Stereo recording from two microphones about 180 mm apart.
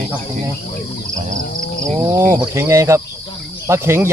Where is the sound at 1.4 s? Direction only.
50° left (ahead or behind).